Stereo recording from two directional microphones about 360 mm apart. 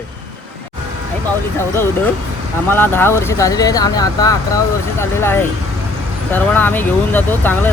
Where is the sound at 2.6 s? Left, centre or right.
Centre.